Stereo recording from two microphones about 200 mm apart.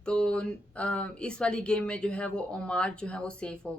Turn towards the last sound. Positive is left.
turn(degrees=5)  # may be behind; listen again after turning